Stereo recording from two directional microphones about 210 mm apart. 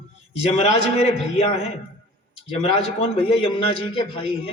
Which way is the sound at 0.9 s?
30° left (ahead or behind).